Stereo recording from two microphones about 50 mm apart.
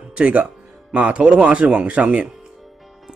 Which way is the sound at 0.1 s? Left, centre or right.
Right.